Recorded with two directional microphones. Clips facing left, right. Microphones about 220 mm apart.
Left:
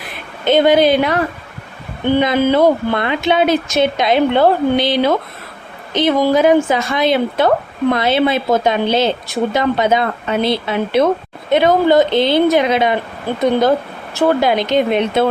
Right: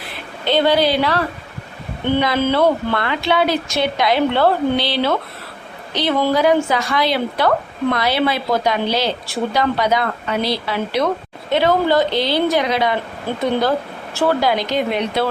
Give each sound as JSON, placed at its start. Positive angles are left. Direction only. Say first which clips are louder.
{"t": 0.0, "sound": "a woman's voice", "louder": "left 4 dB", "side_deg": 20}